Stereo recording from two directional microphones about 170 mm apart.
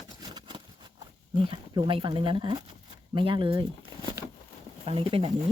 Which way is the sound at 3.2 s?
30° right (ahead or behind).